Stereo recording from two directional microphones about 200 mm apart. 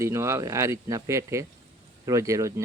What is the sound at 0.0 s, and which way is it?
Speech, 15° right (ahead or behind).